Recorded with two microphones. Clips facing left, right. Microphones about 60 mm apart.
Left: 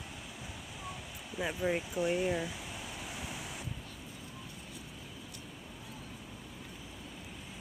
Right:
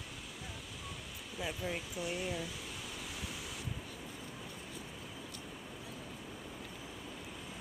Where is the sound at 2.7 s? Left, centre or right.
Centre.